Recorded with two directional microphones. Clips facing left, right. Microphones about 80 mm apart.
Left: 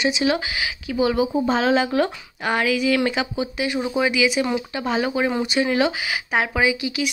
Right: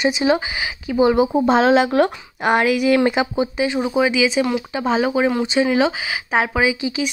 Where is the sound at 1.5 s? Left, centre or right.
Right.